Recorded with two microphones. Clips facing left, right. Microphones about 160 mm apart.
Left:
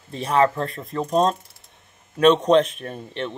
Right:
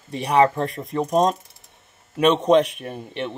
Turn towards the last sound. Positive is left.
turn(degrees=-10)  # may be behind; listen again after turning